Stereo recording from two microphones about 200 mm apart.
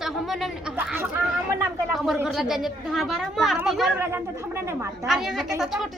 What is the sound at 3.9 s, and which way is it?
A child's voice, 10° right (ahead or behind).